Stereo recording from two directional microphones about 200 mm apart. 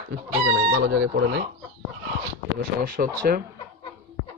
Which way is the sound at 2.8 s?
45° right (ahead or behind).